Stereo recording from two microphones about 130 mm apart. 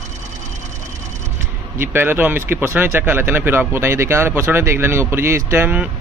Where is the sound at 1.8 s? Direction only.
15° right (ahead or behind).